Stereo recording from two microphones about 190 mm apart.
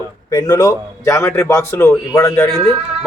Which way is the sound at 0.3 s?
20° left (ahead or behind).